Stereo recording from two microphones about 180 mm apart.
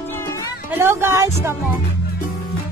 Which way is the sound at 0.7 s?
15° right (ahead or behind).